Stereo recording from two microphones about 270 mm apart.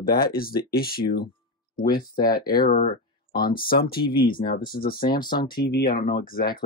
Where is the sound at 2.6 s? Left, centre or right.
Left.